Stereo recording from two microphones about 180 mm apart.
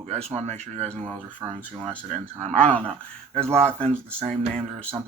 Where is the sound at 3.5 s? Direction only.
35° right (ahead or behind).